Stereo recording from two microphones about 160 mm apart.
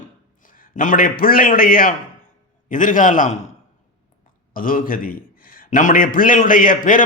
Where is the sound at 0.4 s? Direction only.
55° left (ahead or behind).